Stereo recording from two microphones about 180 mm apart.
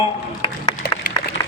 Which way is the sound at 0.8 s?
65° left (ahead or behind).